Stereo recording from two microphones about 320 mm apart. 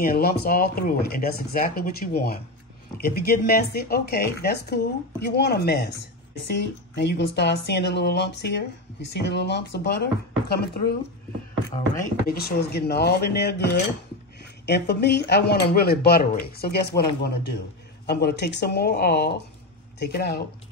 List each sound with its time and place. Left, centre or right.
0.0 s speech: left